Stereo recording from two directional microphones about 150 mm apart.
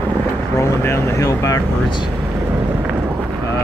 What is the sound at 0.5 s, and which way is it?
Speech, 15° left (ahead or behind).